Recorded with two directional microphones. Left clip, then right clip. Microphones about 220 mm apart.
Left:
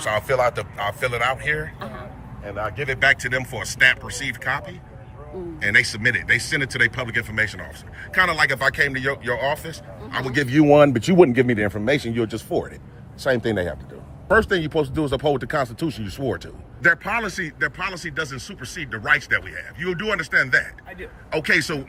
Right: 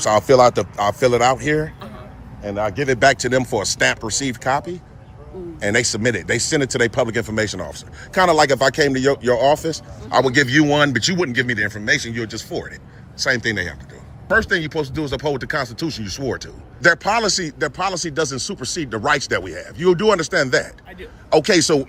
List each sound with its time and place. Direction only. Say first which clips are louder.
0.0 s speech: right 7 dB; 30° right (ahead or behind)
2.9 s speech: right 3 dB; 20° right (ahead or behind); by 10.8 s 5° right (ahead or behind)
11.1 s speech: left 4 dB; 25° left (ahead or behind); by 21.8 s 15° right (ahead or behind)